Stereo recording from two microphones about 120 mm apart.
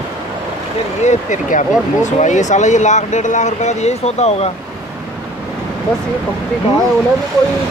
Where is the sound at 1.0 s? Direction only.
90° left; by 4.5 s 65° left (ahead or behind).